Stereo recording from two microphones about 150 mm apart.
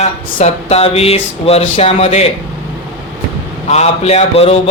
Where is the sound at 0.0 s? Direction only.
50° left (ahead or behind).